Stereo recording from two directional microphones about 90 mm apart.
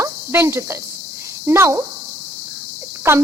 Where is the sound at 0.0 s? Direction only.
30° right (ahead or behind).